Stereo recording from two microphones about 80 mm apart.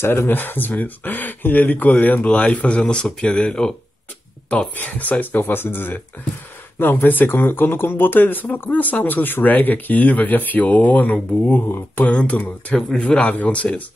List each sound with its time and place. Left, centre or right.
0.0 s speech: left